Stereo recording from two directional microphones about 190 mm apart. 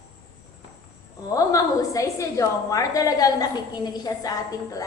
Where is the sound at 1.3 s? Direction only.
15° left (ahead or behind).